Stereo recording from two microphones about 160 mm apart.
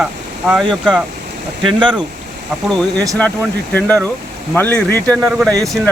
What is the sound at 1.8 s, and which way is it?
Speech, 25° right (ahead or behind).